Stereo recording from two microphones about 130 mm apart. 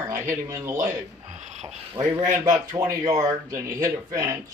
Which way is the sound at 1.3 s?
65° right (ahead or behind).